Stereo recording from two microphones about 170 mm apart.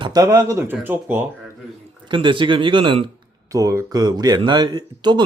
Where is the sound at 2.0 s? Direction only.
30° right (ahead or behind).